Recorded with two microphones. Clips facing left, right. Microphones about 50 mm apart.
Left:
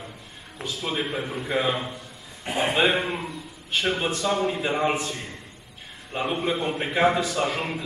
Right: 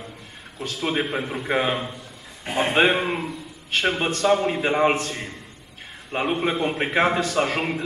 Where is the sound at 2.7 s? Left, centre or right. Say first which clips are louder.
Right 3 dB; right.